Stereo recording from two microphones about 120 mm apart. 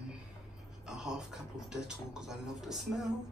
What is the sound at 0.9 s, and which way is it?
Speech, 5° right (ahead or behind).